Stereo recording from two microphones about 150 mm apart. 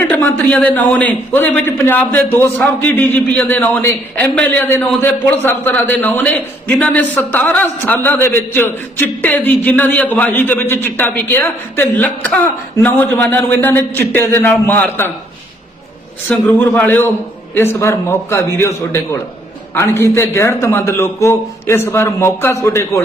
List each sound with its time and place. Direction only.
0.1 s a man's voice: 10° left (ahead or behind)
16.3 s a man's voice: 10° left (ahead or behind)